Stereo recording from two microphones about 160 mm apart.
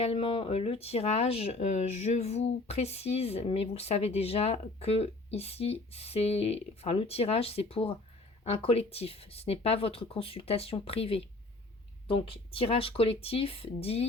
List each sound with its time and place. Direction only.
0.0 s speech: 35° left (ahead or behind)